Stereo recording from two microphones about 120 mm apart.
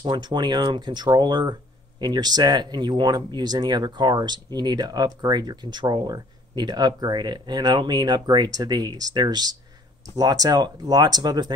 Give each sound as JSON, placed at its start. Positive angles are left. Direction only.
{"t": 0.0, "sound": "speech", "side_deg": -40}